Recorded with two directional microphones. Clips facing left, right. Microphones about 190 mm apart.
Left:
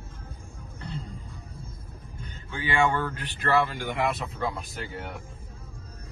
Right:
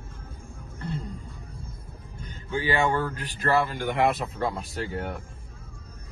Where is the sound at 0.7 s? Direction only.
55° right (ahead or behind).